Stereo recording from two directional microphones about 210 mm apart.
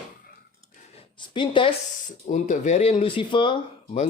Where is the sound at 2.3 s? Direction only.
35° left (ahead or behind).